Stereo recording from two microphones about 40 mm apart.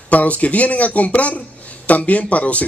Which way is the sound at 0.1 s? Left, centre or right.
Left.